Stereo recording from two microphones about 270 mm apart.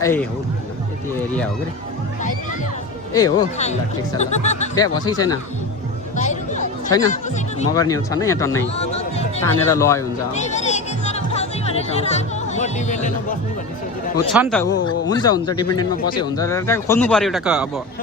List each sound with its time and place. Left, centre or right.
0.0 s speech: centre
3.1 s speech: centre
4.2 s speech: left
4.7 s speech: centre
6.1 s a sound: left
7.1 s speech: left
7.7 s speech: centre
8.7 s a sound: left
9.4 s speech: centre
10.3 s music: left
14.6 s speech: centre